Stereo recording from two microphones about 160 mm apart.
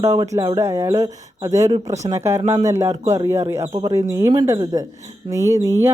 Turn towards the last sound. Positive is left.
turn(degrees=-20)  # may be behind; listen again after turning